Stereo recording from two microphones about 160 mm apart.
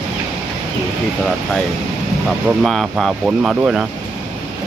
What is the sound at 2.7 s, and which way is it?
Speech, centre (ahead or behind).